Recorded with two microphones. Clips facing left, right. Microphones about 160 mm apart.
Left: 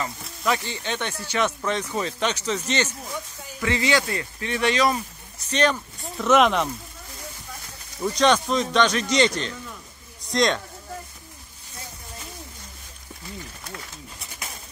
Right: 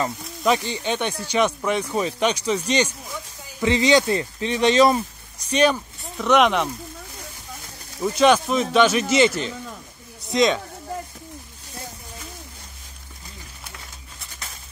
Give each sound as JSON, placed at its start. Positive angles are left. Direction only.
{"t": 0.4, "sound": "speech", "side_deg": -20}
{"t": 5.5, "sound": "speech", "side_deg": -10}
{"t": 5.9, "sound": "speech", "side_deg": 0}
{"t": 8.0, "sound": "speech", "side_deg": -5}